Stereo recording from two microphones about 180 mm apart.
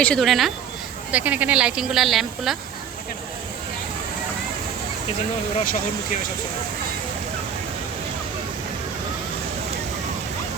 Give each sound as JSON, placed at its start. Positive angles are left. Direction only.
{"t": 0.0, "sound": "speech", "side_deg": 5}
{"t": 5.5, "sound": "speech", "side_deg": 45}